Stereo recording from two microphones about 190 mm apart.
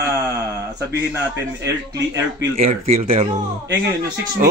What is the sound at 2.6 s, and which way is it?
Speech, 35° right (ahead or behind).